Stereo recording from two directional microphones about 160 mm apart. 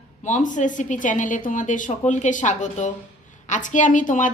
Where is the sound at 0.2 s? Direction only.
50° left (ahead or behind).